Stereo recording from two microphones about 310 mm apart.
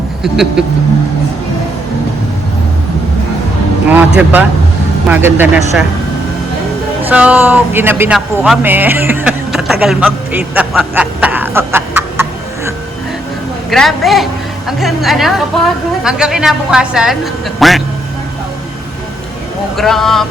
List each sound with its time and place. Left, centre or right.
0.2 s speech: centre
4.2 s speech: centre
7.1 s speech: centre
13.7 s speech: centre
19.7 s speech: centre